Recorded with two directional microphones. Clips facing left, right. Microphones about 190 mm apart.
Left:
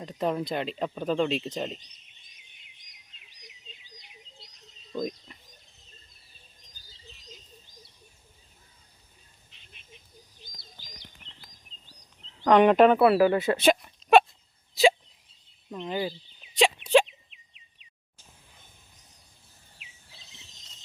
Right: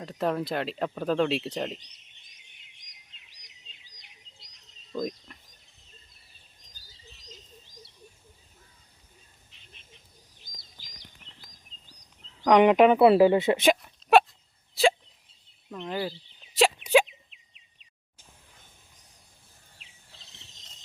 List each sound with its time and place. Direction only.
0.2 s speech: centre (ahead or behind)
4.9 s a sound: 5° left (ahead or behind)
10.5 s bird: 45° right (ahead or behind)
12.5 s speech: 15° right (ahead or behind)
13.8 s whimper: 5° right (ahead or behind)
15.7 s speech: 10° left (ahead or behind)
16.6 s a sound: 5° right (ahead or behind)